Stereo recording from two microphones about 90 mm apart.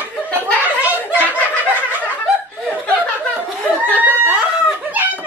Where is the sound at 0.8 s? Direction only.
20° right (ahead or behind).